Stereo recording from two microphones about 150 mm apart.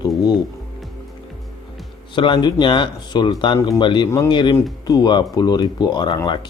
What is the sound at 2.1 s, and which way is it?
Speech, 35° left (ahead or behind).